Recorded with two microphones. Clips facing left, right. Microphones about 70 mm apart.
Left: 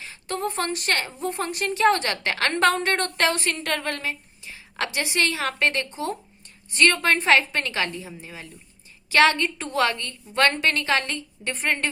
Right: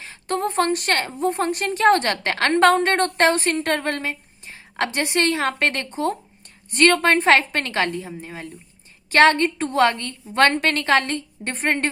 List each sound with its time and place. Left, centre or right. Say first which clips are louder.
0.0 s a woman's voice: right 4 dB; right